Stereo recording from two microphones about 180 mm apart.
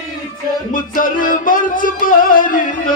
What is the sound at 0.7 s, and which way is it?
Music, 50° left (ahead or behind).